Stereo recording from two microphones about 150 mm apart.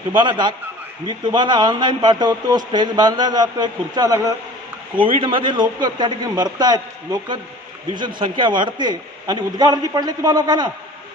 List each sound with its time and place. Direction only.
0.1 s a man's voice: 30° right (ahead or behind)